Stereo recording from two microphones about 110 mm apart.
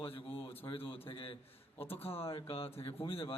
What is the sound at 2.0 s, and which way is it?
Speech, 60° left (ahead or behind).